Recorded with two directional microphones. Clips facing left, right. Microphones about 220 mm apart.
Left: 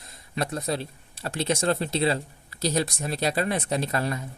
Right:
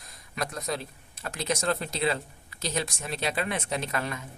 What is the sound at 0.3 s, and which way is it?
Speech, 30° left (ahead or behind).